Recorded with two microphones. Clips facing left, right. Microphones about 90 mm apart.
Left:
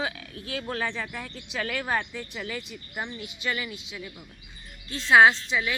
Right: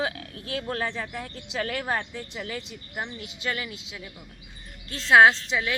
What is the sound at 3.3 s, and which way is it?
Speech, 60° right (ahead or behind).